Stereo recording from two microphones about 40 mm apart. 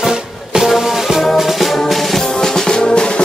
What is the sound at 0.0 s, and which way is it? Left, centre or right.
Music, centre.